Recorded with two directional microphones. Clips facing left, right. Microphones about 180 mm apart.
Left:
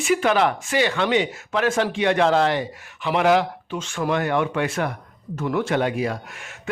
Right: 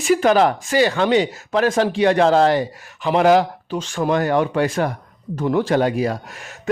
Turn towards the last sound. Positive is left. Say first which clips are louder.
# right 4 dB
turn(degrees=-40)  # may be behind; listen again after turning